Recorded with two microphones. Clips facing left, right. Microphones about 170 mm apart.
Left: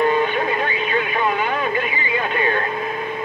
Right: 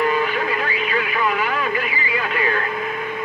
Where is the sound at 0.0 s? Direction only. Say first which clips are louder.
Left 2 dB; 25° left (ahead or behind).